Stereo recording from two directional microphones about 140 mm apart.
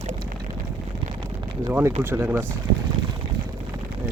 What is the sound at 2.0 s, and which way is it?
Speech, 15° right (ahead or behind).